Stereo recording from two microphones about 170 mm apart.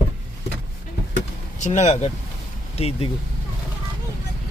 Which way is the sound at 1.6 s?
40° left (ahead or behind).